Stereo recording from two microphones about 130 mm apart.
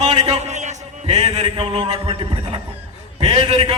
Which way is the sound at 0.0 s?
55° right (ahead or behind).